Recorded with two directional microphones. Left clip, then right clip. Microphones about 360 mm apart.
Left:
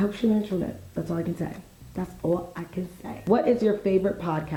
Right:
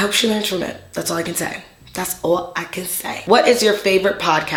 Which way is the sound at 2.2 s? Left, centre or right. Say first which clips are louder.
Right 8 dB; centre.